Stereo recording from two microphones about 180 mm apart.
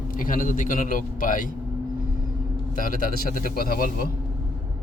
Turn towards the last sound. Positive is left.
turn(degrees=55)  # may be behind; listen again after turning